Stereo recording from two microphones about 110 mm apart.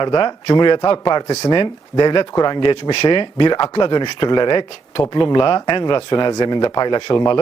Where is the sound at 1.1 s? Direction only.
30° left (ahead or behind).